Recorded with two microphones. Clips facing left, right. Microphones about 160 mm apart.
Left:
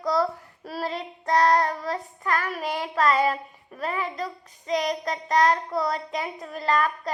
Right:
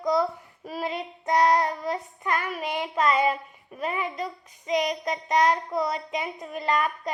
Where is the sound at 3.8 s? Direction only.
20° right (ahead or behind).